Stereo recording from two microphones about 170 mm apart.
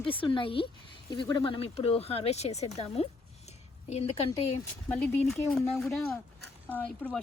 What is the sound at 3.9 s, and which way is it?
Speech, 35° left (ahead or behind).